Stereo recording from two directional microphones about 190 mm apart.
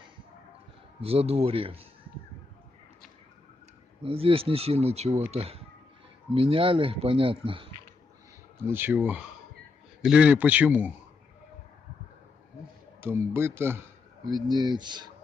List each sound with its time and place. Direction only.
1.0 s speech: 30° right (ahead or behind)
4.0 s speech: 30° right (ahead or behind)
8.6 s speech: 10° right (ahead or behind)
13.0 s speech: 10° right (ahead or behind)